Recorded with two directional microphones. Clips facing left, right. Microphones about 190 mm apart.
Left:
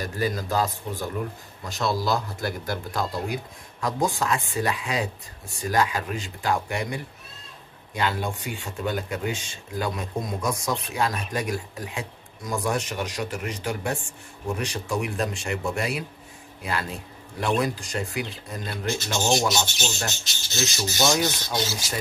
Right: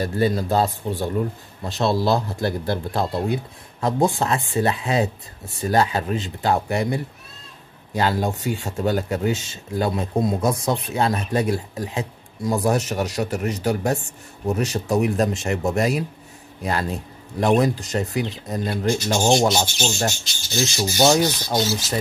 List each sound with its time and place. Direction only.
0.2 s speech: 30° right (ahead or behind)
17.4 s speech: 40° right (ahead or behind)
19.5 s speech: 50° right (ahead or behind)
20.0 s speech: 30° right (ahead or behind)